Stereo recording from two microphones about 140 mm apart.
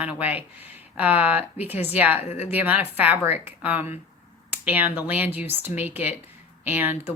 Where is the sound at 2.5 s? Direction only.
10° right (ahead or behind).